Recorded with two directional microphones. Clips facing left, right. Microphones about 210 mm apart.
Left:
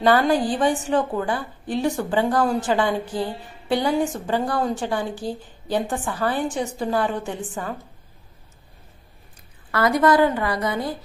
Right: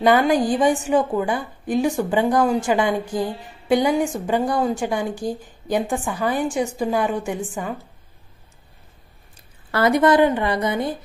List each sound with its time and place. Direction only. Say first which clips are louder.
0.0 s a woman's voice: right 2 dB; 15° right (ahead or behind)
9.7 s a woman's voice: right 2 dB; 25° right (ahead or behind)